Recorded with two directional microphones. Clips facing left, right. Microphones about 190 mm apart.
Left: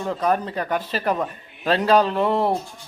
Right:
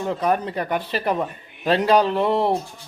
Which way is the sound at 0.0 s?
15° right (ahead or behind).